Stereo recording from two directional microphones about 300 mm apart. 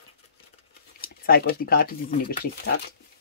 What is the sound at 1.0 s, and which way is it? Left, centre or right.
Speech, left.